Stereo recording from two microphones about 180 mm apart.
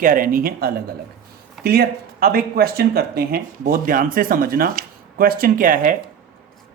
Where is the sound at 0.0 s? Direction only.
50° right (ahead or behind).